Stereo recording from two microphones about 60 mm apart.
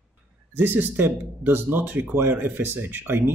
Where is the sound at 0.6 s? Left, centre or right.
Right.